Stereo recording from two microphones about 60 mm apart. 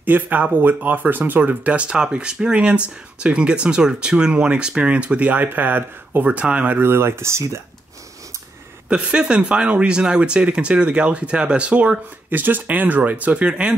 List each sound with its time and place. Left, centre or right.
0.0 s speech: right
6.8 s speech: right
8.8 s speech: centre
12.3 s speech: right; by 13.7 s centre